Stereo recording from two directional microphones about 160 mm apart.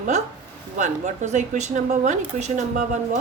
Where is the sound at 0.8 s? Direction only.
50° right (ahead or behind).